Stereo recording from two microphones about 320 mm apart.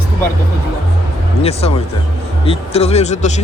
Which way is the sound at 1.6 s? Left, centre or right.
Centre.